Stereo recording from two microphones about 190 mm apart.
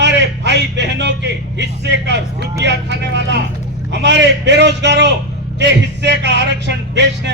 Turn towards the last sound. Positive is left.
turn(degrees=-65)  # may be behind; listen again after turning